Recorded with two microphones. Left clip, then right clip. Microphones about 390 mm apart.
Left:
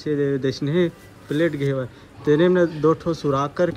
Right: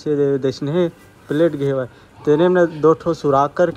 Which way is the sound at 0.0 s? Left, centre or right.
Centre.